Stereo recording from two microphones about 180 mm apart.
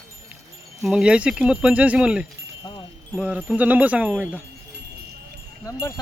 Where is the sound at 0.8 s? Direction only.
5° right (ahead or behind).